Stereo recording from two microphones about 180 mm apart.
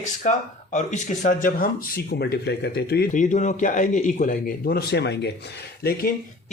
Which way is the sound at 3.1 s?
45° left (ahead or behind).